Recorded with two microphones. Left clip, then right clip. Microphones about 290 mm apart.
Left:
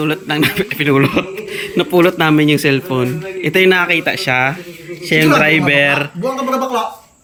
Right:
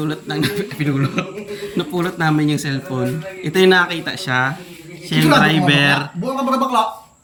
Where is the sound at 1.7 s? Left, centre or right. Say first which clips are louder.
Left 10 dB; centre.